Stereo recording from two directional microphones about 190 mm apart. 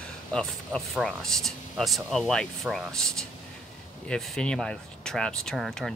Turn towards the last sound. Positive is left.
turn(degrees=0)  # may be behind; listen again after turning